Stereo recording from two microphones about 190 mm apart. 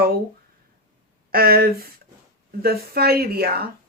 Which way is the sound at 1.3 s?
50° right (ahead or behind).